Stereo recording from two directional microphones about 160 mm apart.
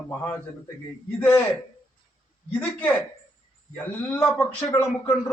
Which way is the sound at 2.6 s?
10° left (ahead or behind).